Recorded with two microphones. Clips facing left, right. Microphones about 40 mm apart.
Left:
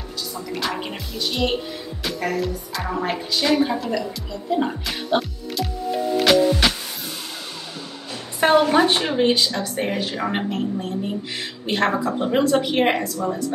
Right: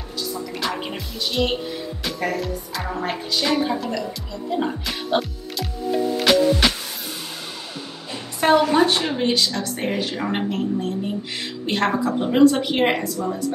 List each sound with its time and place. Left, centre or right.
0.3 s speech: centre
6.1 s music: centre
8.4 s a sound: centre
8.7 s speech: centre